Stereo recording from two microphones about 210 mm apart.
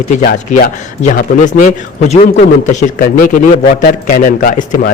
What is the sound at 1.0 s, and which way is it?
A man's voice, 40° left (ahead or behind).